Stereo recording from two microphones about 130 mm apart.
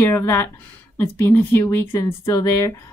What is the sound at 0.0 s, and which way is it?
A woman's voice, 20° left (ahead or behind).